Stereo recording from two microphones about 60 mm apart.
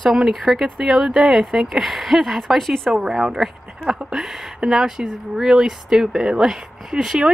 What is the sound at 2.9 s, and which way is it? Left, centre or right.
Speech, centre.